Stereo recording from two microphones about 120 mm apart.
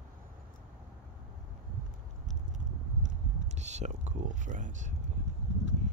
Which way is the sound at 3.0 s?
75° right (ahead or behind).